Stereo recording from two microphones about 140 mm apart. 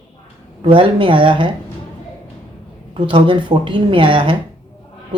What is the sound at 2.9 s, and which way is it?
Speech, 35° right (ahead or behind).